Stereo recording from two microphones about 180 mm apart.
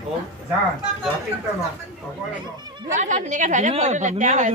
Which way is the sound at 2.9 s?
45° right (ahead or behind).